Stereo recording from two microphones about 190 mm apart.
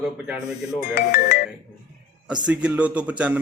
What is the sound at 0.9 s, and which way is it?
Speech, 45° left (ahead or behind).